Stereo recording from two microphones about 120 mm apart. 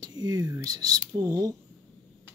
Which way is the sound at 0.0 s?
35° right (ahead or behind).